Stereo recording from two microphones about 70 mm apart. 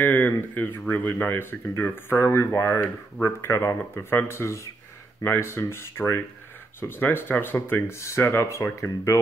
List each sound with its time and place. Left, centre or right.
0.0 s speech: left
8.0 s speech: left